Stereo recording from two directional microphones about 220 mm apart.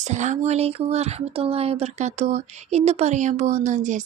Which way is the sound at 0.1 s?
30° right (ahead or behind).